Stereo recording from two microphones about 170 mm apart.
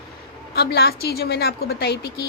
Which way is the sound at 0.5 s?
70° left (ahead or behind).